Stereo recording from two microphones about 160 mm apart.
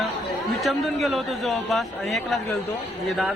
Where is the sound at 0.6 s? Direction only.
Centre (ahead or behind).